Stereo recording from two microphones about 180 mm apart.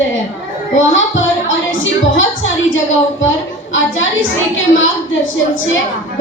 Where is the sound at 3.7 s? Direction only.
90° left.